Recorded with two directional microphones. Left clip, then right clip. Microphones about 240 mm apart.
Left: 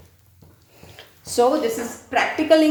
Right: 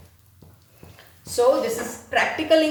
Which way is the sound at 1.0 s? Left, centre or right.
Left.